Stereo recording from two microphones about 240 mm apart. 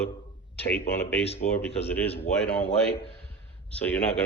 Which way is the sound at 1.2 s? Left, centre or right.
Left.